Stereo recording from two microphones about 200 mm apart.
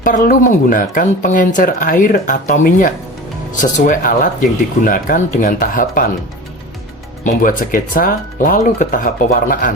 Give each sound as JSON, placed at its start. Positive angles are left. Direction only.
{"t": 0.3, "sound": "speech", "side_deg": 45}
{"t": 7.3, "sound": "speech", "side_deg": 45}